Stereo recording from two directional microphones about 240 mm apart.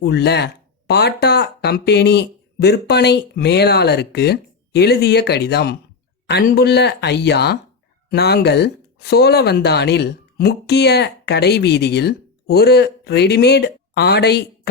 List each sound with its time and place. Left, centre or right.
0.0 s speech: left